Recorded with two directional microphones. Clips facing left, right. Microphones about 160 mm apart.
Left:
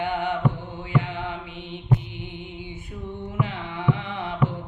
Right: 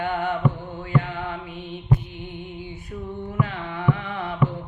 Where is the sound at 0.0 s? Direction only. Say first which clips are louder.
Right 1 dB; 15° left (ahead or behind).